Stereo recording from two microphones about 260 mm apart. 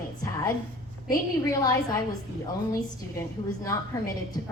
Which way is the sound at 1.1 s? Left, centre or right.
Centre.